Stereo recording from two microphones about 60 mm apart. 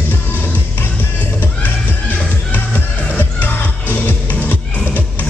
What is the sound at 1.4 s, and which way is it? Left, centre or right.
Music, left.